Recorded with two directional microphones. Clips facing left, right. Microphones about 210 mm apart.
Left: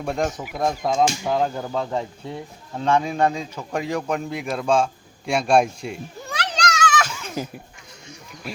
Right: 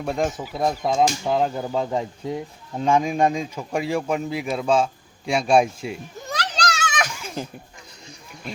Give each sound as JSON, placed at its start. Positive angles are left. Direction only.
{"t": 0.0, "sound": "speech", "side_deg": 0}
{"t": 6.3, "sound": "children playing", "side_deg": -35}
{"t": 8.4, "sound": "speech", "side_deg": 5}